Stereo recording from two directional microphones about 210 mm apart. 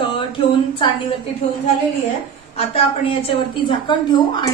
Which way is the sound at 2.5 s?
30° left (ahead or behind).